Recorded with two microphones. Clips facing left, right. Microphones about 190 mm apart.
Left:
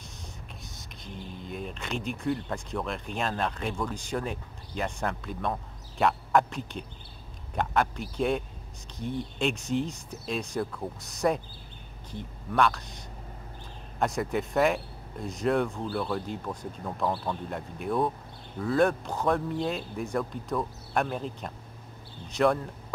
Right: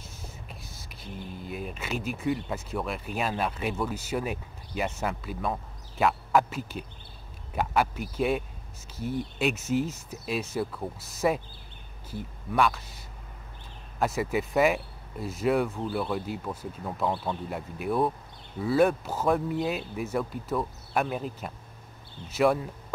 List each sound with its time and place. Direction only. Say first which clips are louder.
1.4 s speech: even; 5° right (ahead or behind)